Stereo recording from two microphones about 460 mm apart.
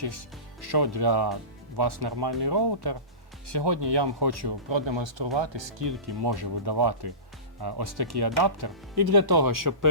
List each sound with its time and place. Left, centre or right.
0.0 s speech: right